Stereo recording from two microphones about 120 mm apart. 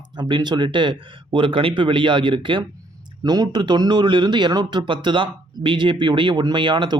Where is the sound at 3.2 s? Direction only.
35° right (ahead or behind).